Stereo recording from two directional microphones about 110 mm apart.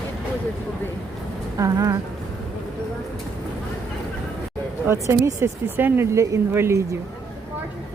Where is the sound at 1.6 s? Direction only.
35° right (ahead or behind).